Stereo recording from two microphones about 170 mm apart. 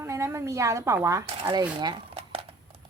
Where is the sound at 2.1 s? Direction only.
35° right (ahead or behind).